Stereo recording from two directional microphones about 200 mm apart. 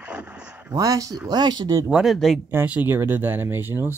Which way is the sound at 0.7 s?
15° right (ahead or behind).